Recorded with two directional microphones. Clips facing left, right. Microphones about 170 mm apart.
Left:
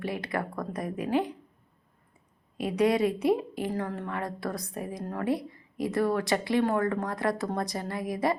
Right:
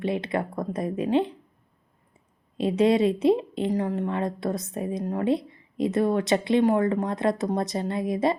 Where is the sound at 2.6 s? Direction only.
25° right (ahead or behind).